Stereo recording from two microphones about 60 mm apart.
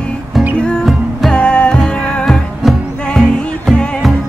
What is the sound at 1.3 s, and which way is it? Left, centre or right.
Music, centre.